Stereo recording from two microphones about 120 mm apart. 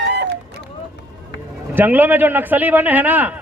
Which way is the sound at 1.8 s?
15° right (ahead or behind).